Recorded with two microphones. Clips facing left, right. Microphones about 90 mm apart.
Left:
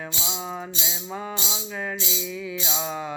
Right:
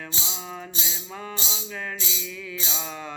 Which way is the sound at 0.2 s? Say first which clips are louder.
Left 6 dB; 20° left (ahead or behind).